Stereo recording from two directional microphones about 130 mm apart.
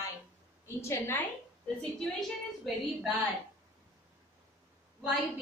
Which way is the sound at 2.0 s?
Centre (ahead or behind).